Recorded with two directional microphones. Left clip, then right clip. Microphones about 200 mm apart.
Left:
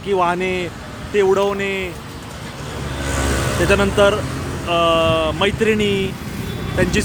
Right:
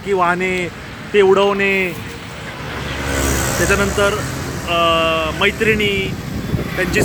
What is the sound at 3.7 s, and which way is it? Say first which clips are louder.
Speech: left 3 dB; 30° left (ahead or behind).